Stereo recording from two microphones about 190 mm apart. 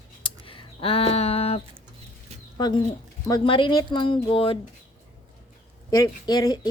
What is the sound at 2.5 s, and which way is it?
Speech, 20° left (ahead or behind).